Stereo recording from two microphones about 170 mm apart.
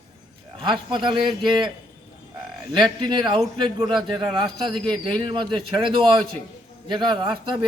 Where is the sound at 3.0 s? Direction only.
30° right (ahead or behind).